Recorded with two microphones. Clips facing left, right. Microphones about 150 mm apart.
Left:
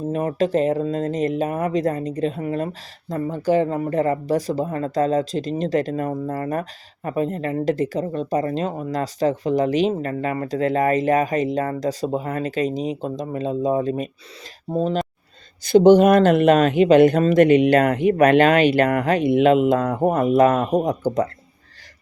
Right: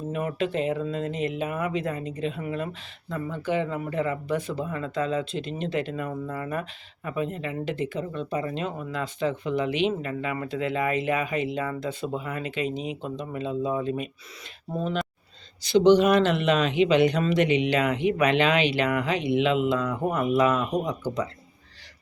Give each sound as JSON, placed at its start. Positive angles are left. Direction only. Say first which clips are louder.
{"t": 0.1, "sound": "speech", "louder": "left 7 dB", "side_deg": 35}
{"t": 15.6, "sound": "a man's voice", "louder": "left 6 dB", "side_deg": 50}